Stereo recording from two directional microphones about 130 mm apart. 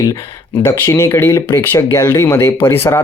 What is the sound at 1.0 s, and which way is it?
Speech, 15° left (ahead or behind).